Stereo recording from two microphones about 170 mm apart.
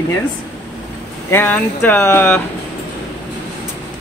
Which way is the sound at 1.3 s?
10° left (ahead or behind).